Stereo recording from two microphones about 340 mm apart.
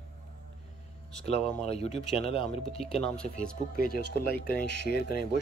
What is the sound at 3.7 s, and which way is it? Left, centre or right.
Speech, left.